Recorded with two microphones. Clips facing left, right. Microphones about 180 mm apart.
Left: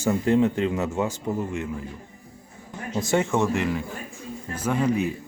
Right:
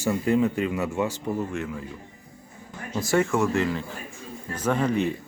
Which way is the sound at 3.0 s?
20° left (ahead or behind).